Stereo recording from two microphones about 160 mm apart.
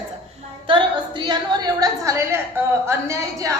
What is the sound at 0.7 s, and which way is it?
A woman's voice, 30° right (ahead or behind).